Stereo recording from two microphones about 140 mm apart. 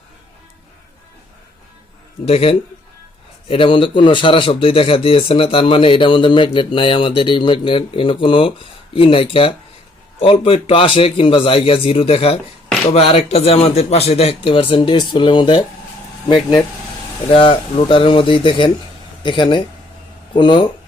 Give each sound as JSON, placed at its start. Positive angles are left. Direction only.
{"t": 2.2, "sound": "a man's voice", "side_deg": 45}
{"t": 17.3, "sound": "a man's voice", "side_deg": 40}